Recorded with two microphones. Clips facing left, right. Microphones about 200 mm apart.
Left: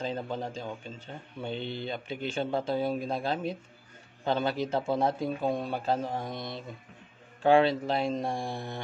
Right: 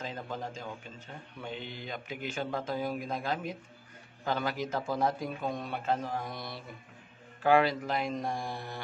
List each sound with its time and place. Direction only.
0.0 s a man's voice: 30° left (ahead or behind)